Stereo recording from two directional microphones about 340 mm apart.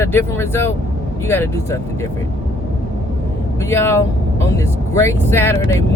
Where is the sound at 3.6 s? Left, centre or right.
Centre.